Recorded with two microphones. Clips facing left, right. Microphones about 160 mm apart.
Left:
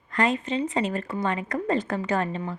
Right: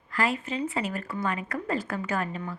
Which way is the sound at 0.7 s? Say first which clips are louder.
Left 4 dB; 35° left (ahead or behind).